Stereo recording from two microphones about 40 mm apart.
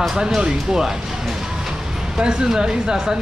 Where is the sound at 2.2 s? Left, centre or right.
Centre.